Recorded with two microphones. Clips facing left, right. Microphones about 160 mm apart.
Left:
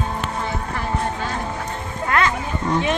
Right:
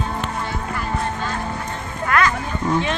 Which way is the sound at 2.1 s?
25° left (ahead or behind).